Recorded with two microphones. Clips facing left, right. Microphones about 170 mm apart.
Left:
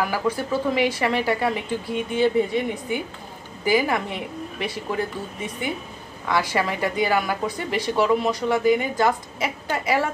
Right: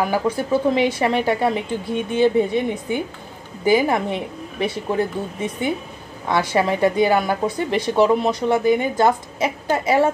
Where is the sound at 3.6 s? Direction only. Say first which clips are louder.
Right 4 dB; 25° right (ahead or behind).